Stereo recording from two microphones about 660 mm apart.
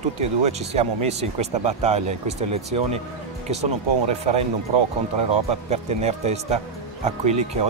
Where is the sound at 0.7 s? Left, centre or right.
Centre.